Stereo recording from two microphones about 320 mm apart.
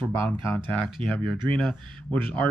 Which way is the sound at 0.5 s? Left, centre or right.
Centre.